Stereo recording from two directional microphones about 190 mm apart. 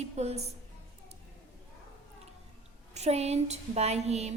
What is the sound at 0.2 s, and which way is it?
Speech, 35° right (ahead or behind).